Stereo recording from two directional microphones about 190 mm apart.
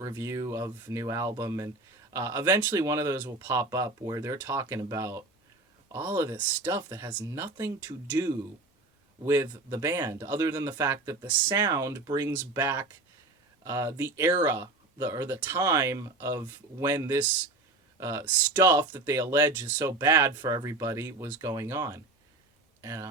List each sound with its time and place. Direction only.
0.0 s speech: 15° right (ahead or behind)